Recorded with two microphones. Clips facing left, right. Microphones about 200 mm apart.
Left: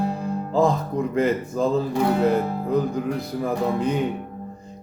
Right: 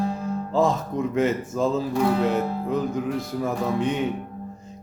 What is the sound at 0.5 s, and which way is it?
Speech, centre (ahead or behind).